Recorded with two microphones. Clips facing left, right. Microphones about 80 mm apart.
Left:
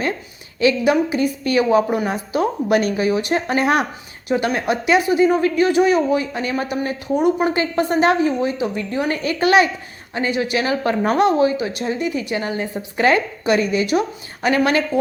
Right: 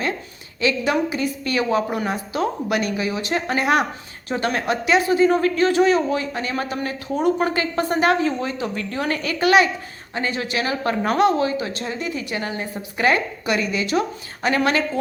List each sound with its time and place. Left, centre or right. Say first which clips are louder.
0.6 s speech: left 4 dB; left